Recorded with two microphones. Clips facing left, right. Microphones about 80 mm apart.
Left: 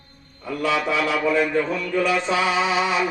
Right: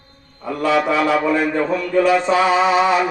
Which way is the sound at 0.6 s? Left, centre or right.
Right.